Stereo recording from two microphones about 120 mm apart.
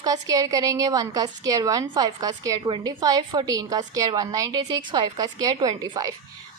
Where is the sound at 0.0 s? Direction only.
30° right (ahead or behind).